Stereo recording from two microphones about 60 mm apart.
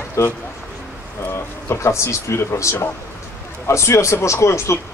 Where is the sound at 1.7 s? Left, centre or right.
Left.